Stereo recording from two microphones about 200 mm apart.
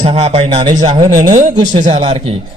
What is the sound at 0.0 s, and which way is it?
Speech, 30° right (ahead or behind).